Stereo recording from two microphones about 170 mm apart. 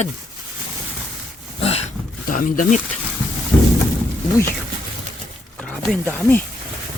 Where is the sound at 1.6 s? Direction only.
35° left (ahead or behind).